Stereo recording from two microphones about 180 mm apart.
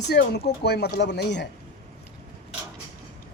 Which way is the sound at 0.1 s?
65° left (ahead or behind).